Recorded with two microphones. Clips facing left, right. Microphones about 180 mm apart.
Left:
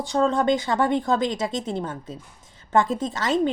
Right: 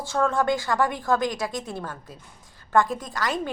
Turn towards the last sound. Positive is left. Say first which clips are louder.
# left 6 dB
turn(degrees=25)  # may be behind; listen again after turning